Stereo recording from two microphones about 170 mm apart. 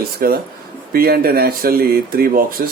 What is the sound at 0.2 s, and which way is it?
Speech, 60° right (ahead or behind).